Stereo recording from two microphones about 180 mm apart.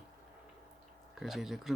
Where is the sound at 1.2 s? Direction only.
Centre (ahead or behind).